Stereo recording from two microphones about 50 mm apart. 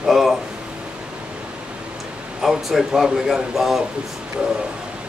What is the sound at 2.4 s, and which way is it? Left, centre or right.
Speech, centre.